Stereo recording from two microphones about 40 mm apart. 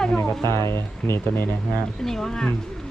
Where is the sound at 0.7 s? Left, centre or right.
Left.